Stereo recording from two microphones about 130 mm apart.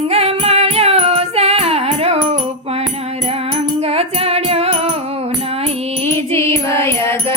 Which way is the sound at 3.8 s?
50° right (ahead or behind).